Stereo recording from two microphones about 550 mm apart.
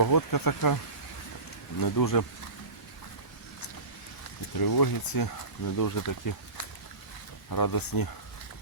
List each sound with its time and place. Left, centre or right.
0.0 s speech: left
1.8 s speech: left
4.5 s speech: left
7.5 s speech: left